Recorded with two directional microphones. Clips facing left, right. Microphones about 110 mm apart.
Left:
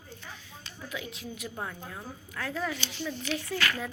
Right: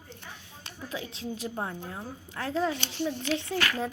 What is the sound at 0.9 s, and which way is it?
A woman's voice, 30° right (ahead or behind).